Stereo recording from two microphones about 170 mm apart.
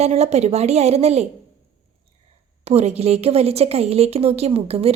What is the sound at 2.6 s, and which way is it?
A woman's voice, 40° right (ahead or behind).